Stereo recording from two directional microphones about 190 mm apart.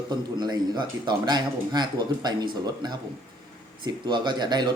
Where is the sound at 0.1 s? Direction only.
20° right (ahead or behind).